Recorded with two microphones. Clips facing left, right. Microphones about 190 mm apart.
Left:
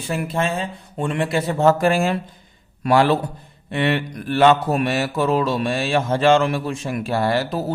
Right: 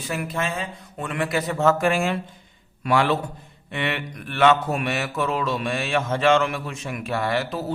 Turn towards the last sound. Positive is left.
turn(degrees=40)  # may be behind; listen again after turning